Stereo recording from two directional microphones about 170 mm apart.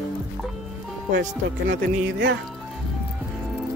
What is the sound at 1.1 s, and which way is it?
Speech, 90° right.